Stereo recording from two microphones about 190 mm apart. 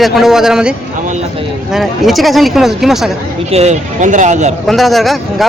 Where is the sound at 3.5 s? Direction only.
35° right (ahead or behind).